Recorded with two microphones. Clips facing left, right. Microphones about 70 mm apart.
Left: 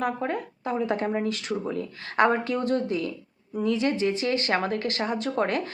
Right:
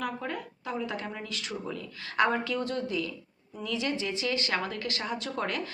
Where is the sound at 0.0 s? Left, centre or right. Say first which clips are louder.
Left 6 dB; left.